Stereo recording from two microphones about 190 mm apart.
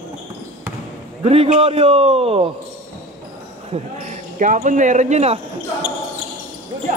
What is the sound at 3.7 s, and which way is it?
Speech, 40° right (ahead or behind).